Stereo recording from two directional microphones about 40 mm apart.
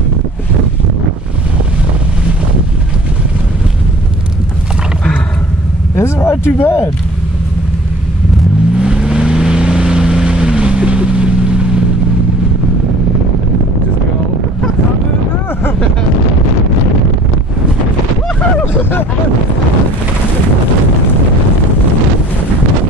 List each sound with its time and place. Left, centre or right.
6.0 s speech: left
8.7 s vehicle: centre
18.8 s a sound: left